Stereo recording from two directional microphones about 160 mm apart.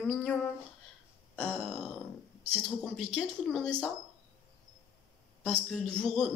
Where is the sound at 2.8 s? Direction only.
Centre (ahead or behind).